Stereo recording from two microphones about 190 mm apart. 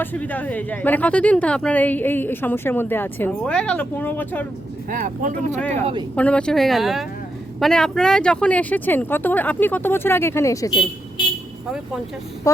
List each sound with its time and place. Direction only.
0.0 s a woman's voice: 10° left (ahead or behind)
4.9 s speech: 45° right (ahead or behind)
5.5 s a woman's voice: 5° left (ahead or behind)
5.8 s speech: 25° right (ahead or behind)
6.1 s a woman's voice: 5° left (ahead or behind)